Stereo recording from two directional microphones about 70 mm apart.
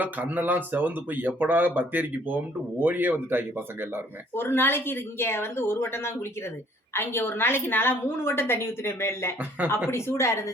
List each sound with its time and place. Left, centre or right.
0.0 s speech: right
4.4 s a woman's voice: left